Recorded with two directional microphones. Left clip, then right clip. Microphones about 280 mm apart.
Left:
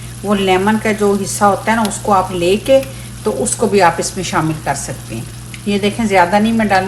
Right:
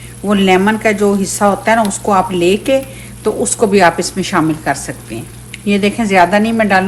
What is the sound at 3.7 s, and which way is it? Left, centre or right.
A woman's voice, right.